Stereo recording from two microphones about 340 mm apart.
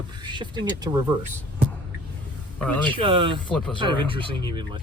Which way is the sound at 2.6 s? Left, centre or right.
Centre.